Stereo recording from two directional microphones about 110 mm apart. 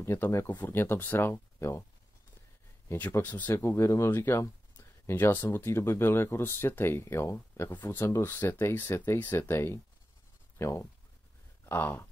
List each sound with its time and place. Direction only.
0.0 s speech: 20° left (ahead or behind)
2.9 s speech: 20° left (ahead or behind)